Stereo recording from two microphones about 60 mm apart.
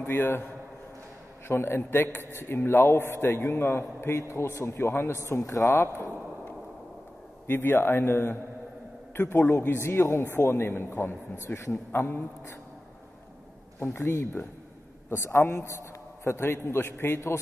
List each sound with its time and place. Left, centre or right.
0.0 s a man's voice: left
1.5 s a man's voice: left
5.1 s a man's voice: left
5.8 s a man's voice: left
7.4 s a man's voice: left
15.0 s a man's voice: left